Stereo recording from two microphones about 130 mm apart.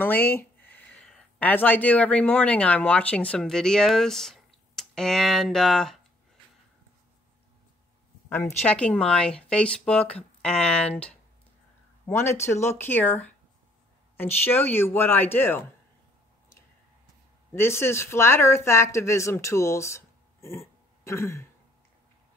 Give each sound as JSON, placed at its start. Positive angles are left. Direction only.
{"t": 0.0, "sound": "speech", "side_deg": 15}
{"t": 8.3, "sound": "a woman's voice", "side_deg": 20}
{"t": 8.6, "sound": "speech", "side_deg": 10}
{"t": 17.5, "sound": "speech", "side_deg": 20}